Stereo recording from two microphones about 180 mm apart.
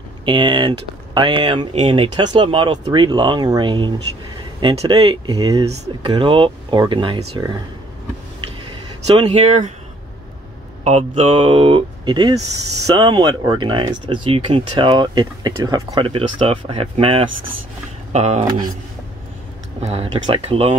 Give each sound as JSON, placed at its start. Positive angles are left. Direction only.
{"t": 0.2, "sound": "speech", "side_deg": -25}
{"t": 9.0, "sound": "speech", "side_deg": -35}
{"t": 10.8, "sound": "speech", "side_deg": -40}
{"t": 19.8, "sound": "speech", "side_deg": -35}